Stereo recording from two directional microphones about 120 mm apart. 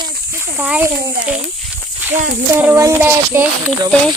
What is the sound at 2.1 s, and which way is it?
Speech, 15° right (ahead or behind).